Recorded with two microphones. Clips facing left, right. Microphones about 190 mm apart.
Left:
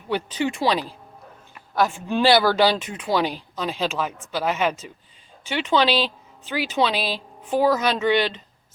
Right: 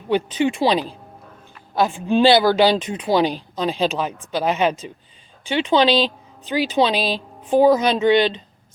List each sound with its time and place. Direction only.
0.1 s a woman's voice: 20° right (ahead or behind)